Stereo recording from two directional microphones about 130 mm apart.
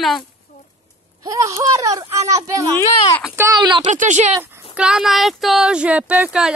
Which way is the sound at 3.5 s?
35° right (ahead or behind).